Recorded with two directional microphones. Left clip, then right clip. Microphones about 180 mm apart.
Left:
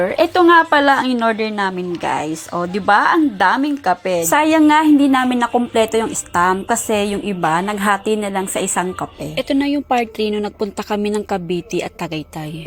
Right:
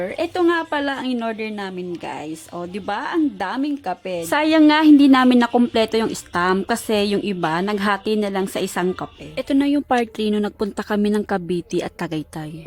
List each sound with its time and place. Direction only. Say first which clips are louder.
0.0 s a woman's voice: left 7 dB; 10° right (ahead or behind)
3.2 s a woman's voice: left 7 dB; 15° right (ahead or behind)
4.6 s a woman's voice: left 1 dB; 30° right (ahead or behind)
6.9 s speech: left 1 dB; 30° right (ahead or behind)
7.4 s a woman's voice: left 6 dB; 20° right (ahead or behind)